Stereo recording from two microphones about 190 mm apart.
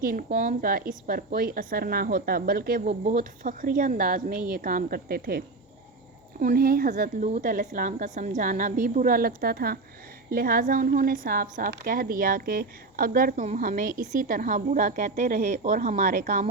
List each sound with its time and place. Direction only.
0.0 s a woman's voice: 50° right (ahead or behind)
6.4 s a woman's voice: 50° right (ahead or behind)